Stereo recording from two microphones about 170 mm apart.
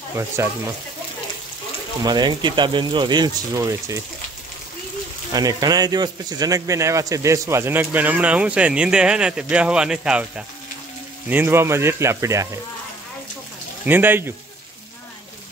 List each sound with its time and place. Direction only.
0.4 s speech: 15° right (ahead or behind)
2.0 s speech: 25° right (ahead or behind)
5.3 s speech: 20° right (ahead or behind)
13.8 s speech: 10° right (ahead or behind)